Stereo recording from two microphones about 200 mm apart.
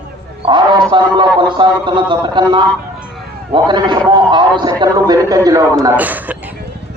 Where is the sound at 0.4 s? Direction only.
20° right (ahead or behind).